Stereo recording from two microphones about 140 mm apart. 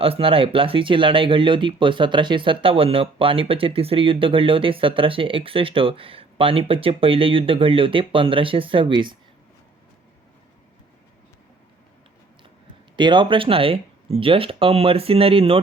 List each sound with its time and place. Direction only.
0.0 s speech: 40° right (ahead or behind)
13.0 s speech: 35° right (ahead or behind)